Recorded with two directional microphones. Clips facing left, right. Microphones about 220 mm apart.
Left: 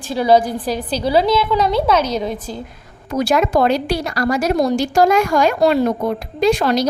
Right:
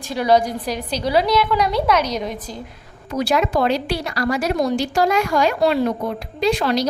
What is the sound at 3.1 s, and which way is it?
Speech, 45° left (ahead or behind).